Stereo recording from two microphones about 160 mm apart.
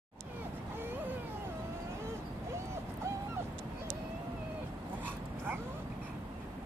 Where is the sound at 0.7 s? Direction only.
15° right (ahead or behind).